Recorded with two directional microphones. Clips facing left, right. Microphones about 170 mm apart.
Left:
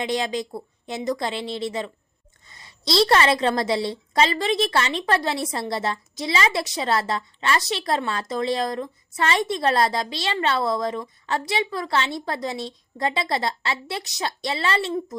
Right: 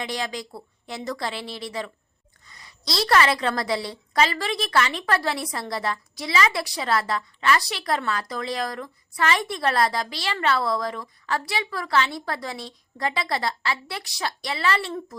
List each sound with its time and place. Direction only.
0.0 s a woman's voice: 20° left (ahead or behind)